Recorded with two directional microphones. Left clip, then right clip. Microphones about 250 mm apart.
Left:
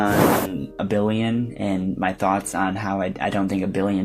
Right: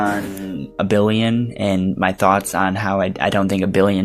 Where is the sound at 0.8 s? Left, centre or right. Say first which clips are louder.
Right 6 dB; right.